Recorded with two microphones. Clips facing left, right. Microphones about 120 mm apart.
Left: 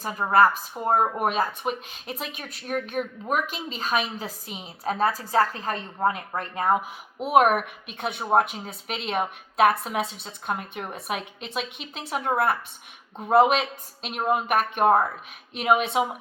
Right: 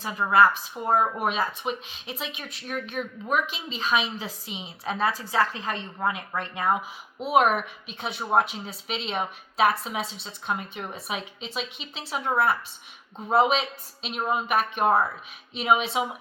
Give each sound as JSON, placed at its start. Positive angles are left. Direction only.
{"t": 0.0, "sound": "speech", "side_deg": 45}